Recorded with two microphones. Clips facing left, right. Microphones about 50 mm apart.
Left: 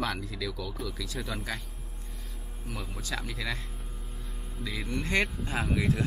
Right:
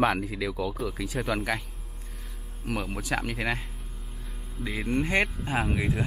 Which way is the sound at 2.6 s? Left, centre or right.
Right.